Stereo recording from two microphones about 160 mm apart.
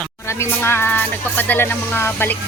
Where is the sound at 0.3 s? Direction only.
15° left (ahead or behind).